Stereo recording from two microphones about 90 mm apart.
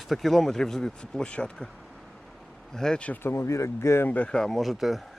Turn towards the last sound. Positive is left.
turn(degrees=0)  # may be behind; listen again after turning